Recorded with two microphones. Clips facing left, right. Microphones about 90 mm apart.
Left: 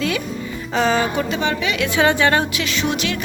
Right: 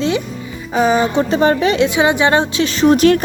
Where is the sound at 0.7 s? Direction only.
15° right (ahead or behind).